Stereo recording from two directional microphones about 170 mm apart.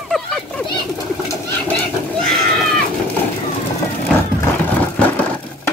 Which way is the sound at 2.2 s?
Centre (ahead or behind).